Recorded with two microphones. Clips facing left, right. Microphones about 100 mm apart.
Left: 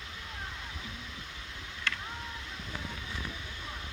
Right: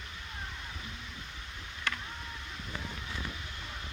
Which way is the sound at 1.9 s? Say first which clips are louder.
Even; 15° right (ahead or behind).